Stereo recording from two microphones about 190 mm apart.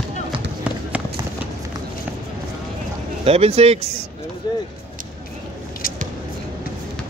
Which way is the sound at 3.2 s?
30° right (ahead or behind).